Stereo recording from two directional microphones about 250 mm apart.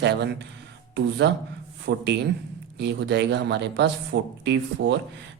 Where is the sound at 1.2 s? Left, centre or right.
Right.